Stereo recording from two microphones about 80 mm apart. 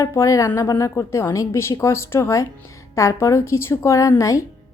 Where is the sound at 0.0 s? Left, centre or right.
Left.